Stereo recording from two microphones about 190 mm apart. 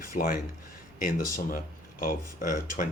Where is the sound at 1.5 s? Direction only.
50° left (ahead or behind).